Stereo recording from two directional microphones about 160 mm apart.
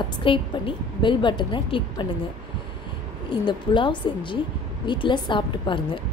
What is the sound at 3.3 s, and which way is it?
A woman's voice, 30° left (ahead or behind).